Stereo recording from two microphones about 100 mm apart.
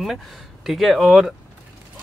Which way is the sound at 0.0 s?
Centre (ahead or behind).